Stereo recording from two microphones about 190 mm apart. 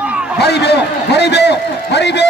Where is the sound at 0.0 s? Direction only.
5° right (ahead or behind).